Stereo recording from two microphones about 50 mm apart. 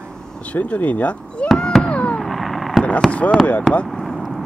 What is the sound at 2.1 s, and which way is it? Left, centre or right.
Cat, centre.